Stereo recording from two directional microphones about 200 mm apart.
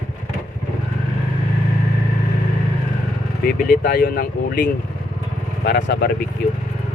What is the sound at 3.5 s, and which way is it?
Speech, 45° left (ahead or behind).